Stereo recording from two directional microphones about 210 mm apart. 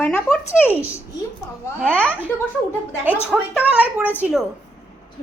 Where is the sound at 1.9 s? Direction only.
10° left (ahead or behind).